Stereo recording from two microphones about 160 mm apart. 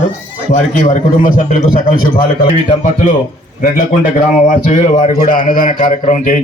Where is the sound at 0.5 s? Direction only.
50° left (ahead or behind).